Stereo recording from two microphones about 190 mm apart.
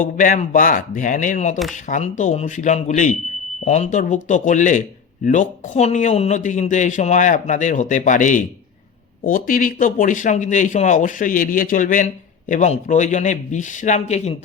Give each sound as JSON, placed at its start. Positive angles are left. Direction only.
{"t": 0.0, "sound": "a man's voice", "side_deg": 45}